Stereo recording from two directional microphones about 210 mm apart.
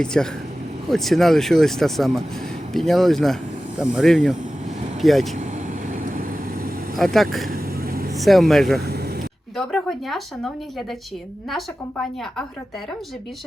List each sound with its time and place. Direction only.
0.0 s speech: 5° left (ahead or behind)
5.9 s vehicle: 40° right (ahead or behind)
6.9 s speech: centre (ahead or behind)
7.5 s vehicle: 45° right (ahead or behind)
8.1 s speech: centre (ahead or behind)
8.9 s vehicle: 50° right (ahead or behind)
9.6 s speech: centre (ahead or behind)